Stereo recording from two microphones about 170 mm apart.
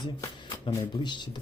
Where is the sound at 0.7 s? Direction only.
25° left (ahead or behind).